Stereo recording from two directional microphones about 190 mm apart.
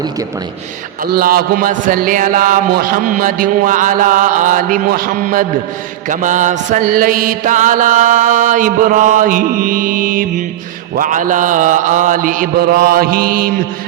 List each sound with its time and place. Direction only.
1.1 s speech: 50° right (ahead or behind)